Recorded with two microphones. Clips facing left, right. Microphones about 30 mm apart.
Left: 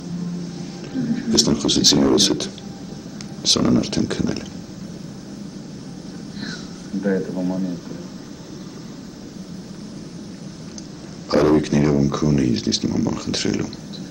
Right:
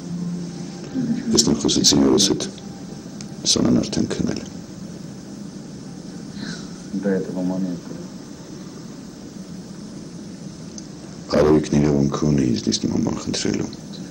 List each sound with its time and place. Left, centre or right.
0.6 s speech: centre
6.4 s a sound: centre
11.2 s speech: centre